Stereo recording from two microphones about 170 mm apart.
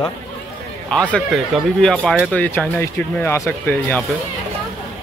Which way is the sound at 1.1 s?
Centre (ahead or behind).